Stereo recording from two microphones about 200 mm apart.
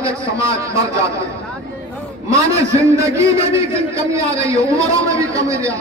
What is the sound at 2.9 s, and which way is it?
A man's voice, 15° right (ahead or behind).